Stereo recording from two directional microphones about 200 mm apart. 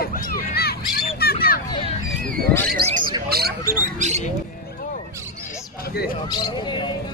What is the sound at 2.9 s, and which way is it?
Speech, 25° right (ahead or behind).